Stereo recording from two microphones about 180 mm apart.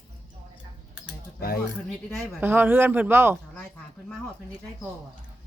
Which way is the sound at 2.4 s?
10° right (ahead or behind).